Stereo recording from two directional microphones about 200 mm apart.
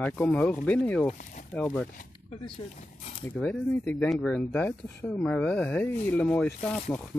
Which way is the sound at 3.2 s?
5° left (ahead or behind).